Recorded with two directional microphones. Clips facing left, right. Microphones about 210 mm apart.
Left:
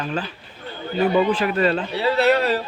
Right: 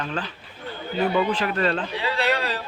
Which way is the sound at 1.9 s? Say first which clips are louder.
Left 7 dB; 40° left (ahead or behind).